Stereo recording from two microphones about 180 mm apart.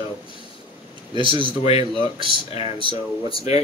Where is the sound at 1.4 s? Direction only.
30° left (ahead or behind).